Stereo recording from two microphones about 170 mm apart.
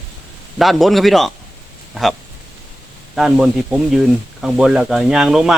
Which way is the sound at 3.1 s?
5° right (ahead or behind).